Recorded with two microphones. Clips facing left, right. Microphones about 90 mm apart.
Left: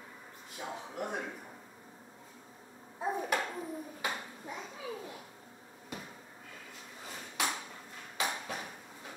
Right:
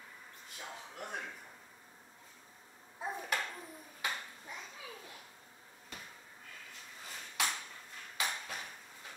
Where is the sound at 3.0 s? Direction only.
10° left (ahead or behind).